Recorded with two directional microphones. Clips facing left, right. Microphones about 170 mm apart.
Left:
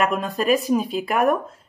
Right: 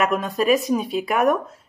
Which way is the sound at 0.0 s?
Centre (ahead or behind).